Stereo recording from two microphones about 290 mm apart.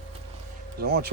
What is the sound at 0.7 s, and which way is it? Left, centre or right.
Speech, right.